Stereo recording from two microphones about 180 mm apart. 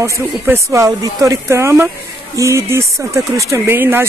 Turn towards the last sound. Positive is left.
turn(degrees=-10)  # may be behind; listen again after turning